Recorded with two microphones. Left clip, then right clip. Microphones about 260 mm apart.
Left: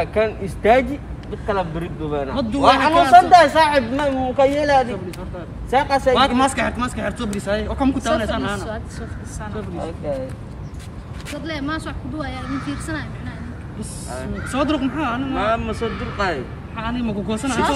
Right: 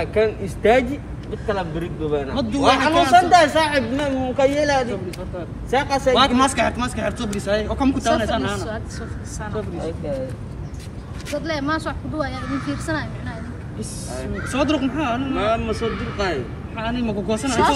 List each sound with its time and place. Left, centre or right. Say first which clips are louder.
0.0 s speech: even; left
2.9 s speech: left 4 dB; centre
3.2 s speech: left 4 dB; left
6.1 s speech: even; centre
11.4 s speech: right 2 dB; centre
13.7 s speech: even; centre